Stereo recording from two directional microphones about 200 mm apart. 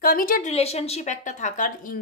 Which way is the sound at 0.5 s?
30° left (ahead or behind).